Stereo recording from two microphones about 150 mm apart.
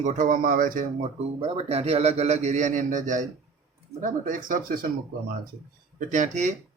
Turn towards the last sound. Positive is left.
turn(degrees=-55)  # may be behind; listen again after turning